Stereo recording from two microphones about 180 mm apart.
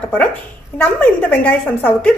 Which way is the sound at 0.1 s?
10° left (ahead or behind).